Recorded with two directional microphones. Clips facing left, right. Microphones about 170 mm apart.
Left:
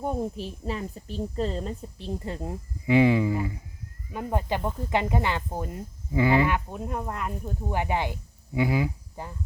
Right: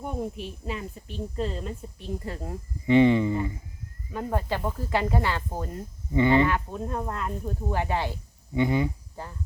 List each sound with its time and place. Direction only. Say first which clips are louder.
0.0 s a woman's voice: left 3 dB; 40° left (ahead or behind)
2.8 s speech: right 1 dB; 5° left (ahead or behind)
4.1 s speech: even; 15° left (ahead or behind)
6.1 s speech: right 1 dB; 5° left (ahead or behind)
8.5 s speech: right 1 dB; 5° left (ahead or behind)